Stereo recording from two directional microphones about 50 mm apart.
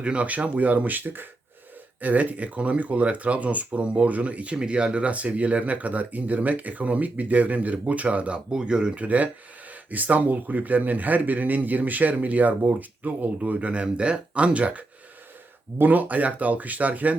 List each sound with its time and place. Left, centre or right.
0.0 s a man's voice: right
9.0 s a man's voice: right